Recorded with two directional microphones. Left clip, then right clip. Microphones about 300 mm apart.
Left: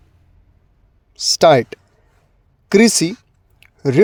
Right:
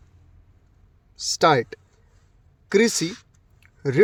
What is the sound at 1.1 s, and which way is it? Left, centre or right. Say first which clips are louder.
Speech: left 7 dB; left.